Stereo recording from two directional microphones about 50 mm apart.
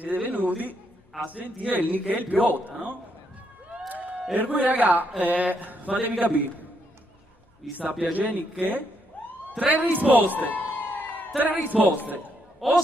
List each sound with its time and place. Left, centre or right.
0.0 s a man's voice: right
3.9 s a sound: right
4.4 s a man's voice: right
8.0 s a man's voice: right
10.5 s a sound: left
11.3 s a man's voice: right
12.6 s speech: centre